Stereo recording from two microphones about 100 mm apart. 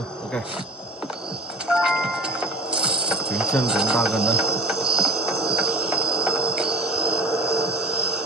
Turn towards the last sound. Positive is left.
turn(degrees=-10)  # may be behind; listen again after turning